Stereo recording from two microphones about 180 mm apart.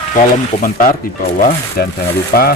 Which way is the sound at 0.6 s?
50° left (ahead or behind).